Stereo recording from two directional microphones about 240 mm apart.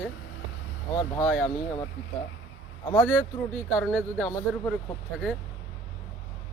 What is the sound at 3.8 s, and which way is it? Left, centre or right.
Speech, centre.